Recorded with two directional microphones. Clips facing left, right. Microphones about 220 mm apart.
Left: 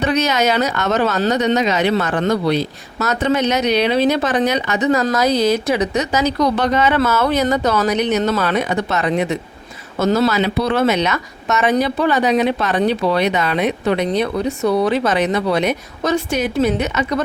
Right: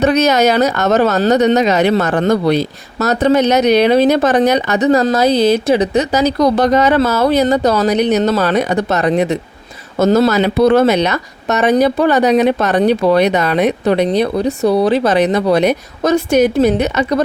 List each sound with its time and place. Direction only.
0.0 s speech: 45° right (ahead or behind)